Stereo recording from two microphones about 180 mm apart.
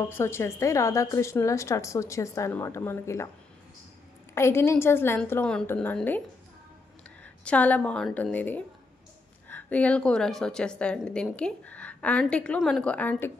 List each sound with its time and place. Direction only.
0.1 s a woman's voice: 15° left (ahead or behind)
4.4 s a woman's voice: 15° left (ahead or behind)
7.4 s a woman's voice: 10° left (ahead or behind)